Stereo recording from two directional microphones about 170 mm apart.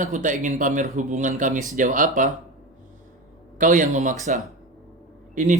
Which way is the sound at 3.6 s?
50° right (ahead or behind).